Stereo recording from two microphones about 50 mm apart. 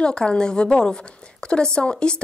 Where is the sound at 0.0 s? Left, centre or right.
Centre.